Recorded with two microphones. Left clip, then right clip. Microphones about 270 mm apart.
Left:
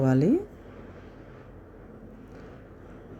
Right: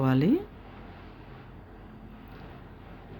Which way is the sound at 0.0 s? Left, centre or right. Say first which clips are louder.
Left 2 dB; centre.